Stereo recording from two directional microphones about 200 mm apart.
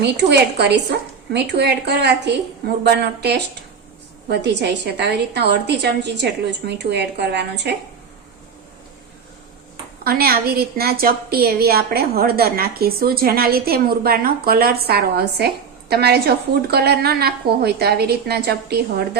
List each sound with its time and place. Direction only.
0.3 s a woman's voice: 55° right (ahead or behind)
10.0 s a woman's voice: 50° right (ahead or behind)